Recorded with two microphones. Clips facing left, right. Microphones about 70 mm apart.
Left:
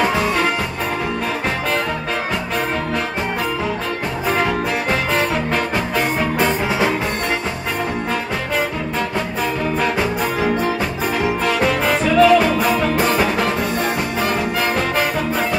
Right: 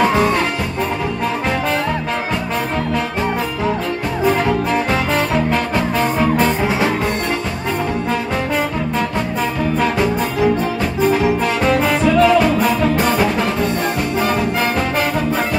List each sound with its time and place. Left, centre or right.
6.3 s music: centre
12.2 s music: centre